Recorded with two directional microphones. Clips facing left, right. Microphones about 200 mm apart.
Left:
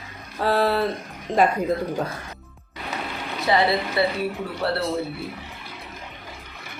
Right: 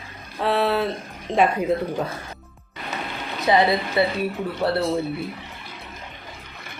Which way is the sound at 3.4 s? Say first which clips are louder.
Right 2 dB; 20° right (ahead or behind).